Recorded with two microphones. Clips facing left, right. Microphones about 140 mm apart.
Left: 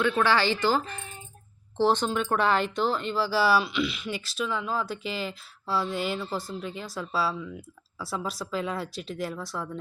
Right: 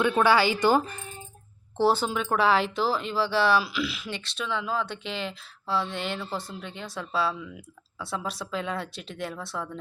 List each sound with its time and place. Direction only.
0.0 s speech: 15° right (ahead or behind); by 9.6 s centre (ahead or behind)